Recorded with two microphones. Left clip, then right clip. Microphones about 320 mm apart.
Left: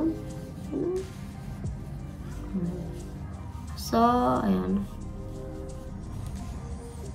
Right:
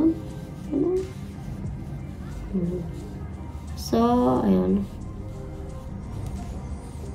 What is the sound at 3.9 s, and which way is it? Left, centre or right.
Speech, centre.